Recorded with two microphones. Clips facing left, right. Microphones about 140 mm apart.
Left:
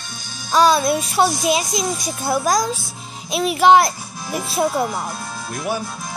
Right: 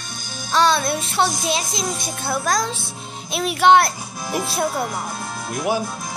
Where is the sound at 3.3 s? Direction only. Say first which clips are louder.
Left 2 dB; centre (ahead or behind).